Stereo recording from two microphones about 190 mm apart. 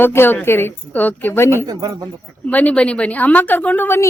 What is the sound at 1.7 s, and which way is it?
Speech, 20° right (ahead or behind).